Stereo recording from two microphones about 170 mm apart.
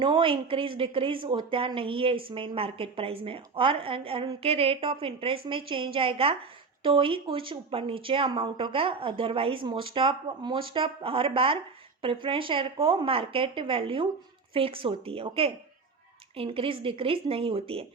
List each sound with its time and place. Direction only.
0.0 s a woman's voice: 30° right (ahead or behind)